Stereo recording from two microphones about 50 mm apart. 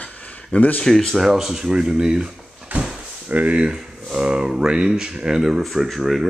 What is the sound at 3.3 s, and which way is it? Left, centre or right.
Speech, right.